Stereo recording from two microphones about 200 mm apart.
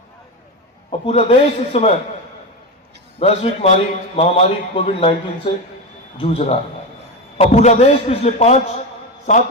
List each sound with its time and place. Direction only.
0.9 s a man's voice: 30° left (ahead or behind)
3.2 s a man's voice: 30° left (ahead or behind)
6.1 s a man's voice: 30° left (ahead or behind)